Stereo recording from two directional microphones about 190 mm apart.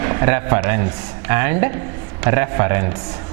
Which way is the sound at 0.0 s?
20° right (ahead or behind).